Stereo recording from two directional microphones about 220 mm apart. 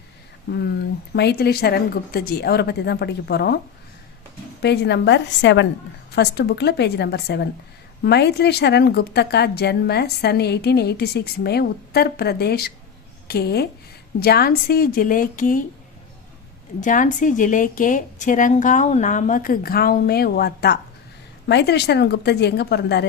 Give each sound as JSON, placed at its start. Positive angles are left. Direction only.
{"t": 0.5, "sound": "a woman's voice", "side_deg": 50}
{"t": 4.6, "sound": "a woman's voice", "side_deg": 50}
{"t": 16.8, "sound": "a woman's voice", "side_deg": 35}